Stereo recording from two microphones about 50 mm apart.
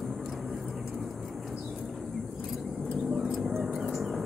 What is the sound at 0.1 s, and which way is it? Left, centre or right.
Vehicle, centre.